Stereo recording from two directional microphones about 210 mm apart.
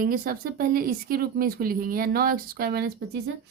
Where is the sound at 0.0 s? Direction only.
45° right (ahead or behind).